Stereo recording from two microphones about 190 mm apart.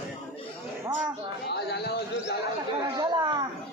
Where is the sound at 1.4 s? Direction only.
60° left (ahead or behind).